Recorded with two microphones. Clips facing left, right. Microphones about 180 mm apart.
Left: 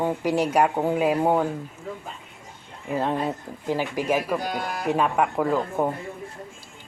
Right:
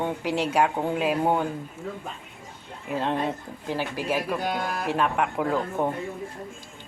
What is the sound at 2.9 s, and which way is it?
A man's voice, 5° left (ahead or behind).